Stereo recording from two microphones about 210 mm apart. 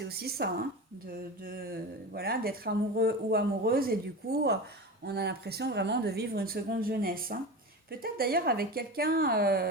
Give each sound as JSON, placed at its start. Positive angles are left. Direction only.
{"t": 0.0, "sound": "speech", "side_deg": -50}